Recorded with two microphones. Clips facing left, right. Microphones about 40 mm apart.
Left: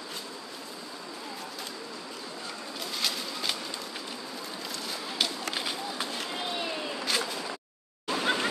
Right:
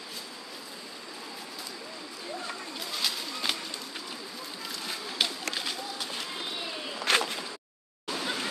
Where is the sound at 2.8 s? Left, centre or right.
Centre.